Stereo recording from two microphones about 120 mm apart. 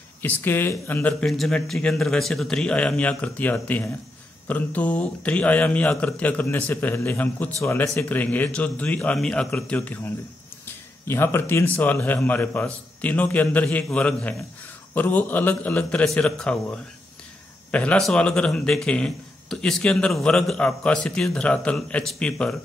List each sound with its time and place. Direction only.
0.2 s speech: 15° left (ahead or behind)
1.2 s speech: 5° left (ahead or behind)